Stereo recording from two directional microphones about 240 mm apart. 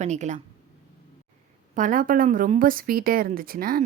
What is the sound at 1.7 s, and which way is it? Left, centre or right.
Speech, right.